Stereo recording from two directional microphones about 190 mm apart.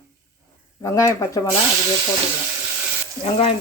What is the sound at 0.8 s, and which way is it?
Speech, 15° left (ahead or behind).